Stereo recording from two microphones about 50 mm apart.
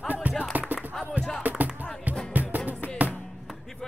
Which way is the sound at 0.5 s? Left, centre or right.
Right.